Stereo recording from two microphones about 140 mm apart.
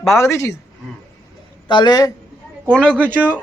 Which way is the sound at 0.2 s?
20° left (ahead or behind).